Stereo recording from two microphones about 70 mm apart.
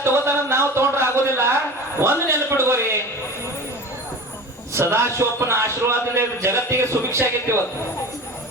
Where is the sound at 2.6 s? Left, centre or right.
Right.